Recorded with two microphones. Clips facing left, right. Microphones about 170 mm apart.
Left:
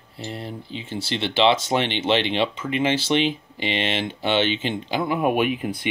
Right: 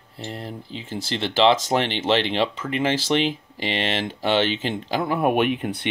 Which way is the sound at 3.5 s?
40° right (ahead or behind).